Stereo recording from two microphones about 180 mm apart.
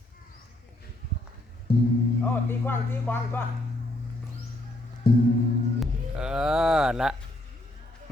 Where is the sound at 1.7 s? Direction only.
60° left (ahead or behind).